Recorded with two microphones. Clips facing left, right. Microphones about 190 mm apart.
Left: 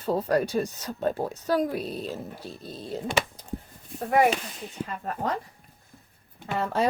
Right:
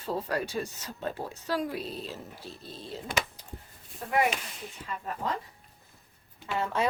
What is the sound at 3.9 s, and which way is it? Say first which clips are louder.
Speech: left 6 dB; 45° left (ahead or behind).